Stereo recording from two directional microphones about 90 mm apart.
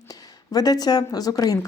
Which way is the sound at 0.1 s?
45° left (ahead or behind).